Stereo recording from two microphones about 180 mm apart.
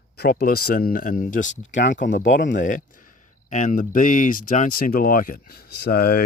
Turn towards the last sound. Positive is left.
turn(degrees=55)  # may be behind; listen again after turning